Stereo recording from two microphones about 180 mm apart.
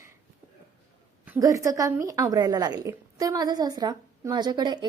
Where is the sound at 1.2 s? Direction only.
15° right (ahead or behind).